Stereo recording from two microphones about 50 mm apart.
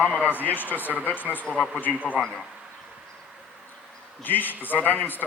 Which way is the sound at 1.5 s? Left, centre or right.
Left.